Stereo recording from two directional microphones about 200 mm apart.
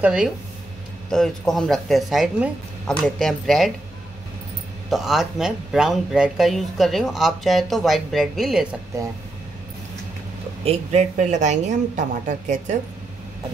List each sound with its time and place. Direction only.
0.0 s speech: 5° right (ahead or behind)
4.8 s speech: centre (ahead or behind)
10.6 s a woman's voice: 30° right (ahead or behind)